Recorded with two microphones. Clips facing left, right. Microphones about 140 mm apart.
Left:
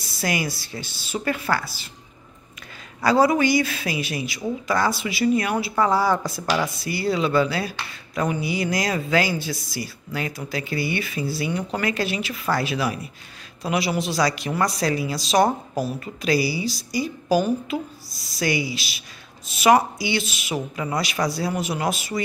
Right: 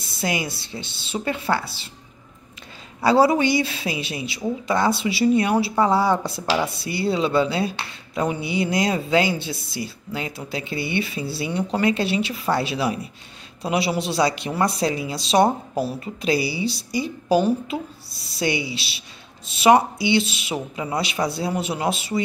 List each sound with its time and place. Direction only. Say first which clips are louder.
0.2 s speech: even; 25° right (ahead or behind)
3.0 s speech: right 1 dB; 30° right (ahead or behind)